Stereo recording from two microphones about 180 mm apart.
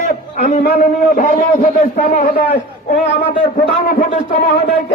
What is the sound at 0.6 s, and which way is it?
A woman's voice, 55° left (ahead or behind).